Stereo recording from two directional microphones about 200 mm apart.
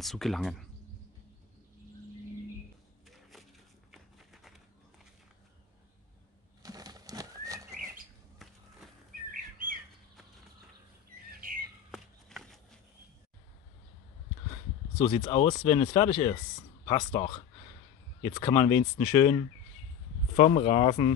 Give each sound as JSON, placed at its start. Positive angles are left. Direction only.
{"t": 0.0, "sound": "speech", "side_deg": 0}
{"t": 3.9, "sound": "walk", "side_deg": 0}
{"t": 6.6, "sound": "bird flight", "side_deg": -20}
{"t": 8.4, "sound": "a sound", "side_deg": 0}
{"t": 9.3, "sound": "bird", "side_deg": -45}
{"t": 11.9, "sound": "horse", "side_deg": 0}
{"t": 15.0, "sound": "speech", "side_deg": 25}